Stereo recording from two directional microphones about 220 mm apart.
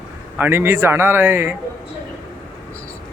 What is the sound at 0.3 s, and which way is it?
Speech, 10° right (ahead or behind).